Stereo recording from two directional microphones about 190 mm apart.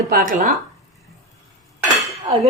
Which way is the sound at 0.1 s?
45° right (ahead or behind).